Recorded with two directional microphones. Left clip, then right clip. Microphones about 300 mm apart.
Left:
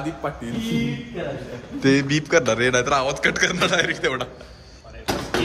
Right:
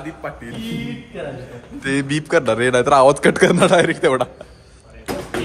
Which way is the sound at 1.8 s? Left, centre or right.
Centre.